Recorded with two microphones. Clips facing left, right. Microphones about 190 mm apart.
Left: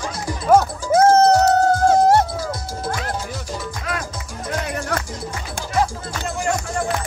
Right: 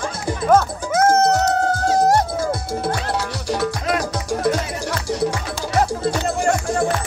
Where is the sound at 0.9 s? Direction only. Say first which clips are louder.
Left 3 dB; 30° left (ahead or behind).